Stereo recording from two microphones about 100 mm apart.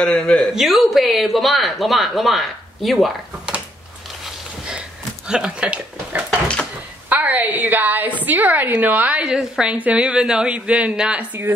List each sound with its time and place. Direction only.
0.0 s speech: 10° left (ahead or behind)
0.6 s speech: centre (ahead or behind)
4.6 s a sound: 10° right (ahead or behind)
7.1 s a woman's voice: 15° right (ahead or behind)